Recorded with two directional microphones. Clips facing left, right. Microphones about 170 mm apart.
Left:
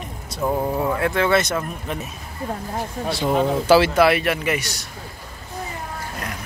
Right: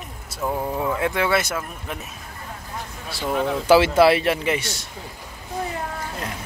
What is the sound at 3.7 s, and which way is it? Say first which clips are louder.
Speech: right 1 dB; 25° right (ahead or behind).